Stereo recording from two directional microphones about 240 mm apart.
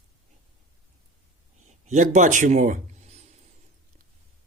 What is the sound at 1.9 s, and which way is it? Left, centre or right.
A man's voice, right.